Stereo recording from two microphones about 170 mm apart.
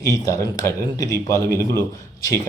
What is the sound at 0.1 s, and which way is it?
A man's voice, 20° left (ahead or behind).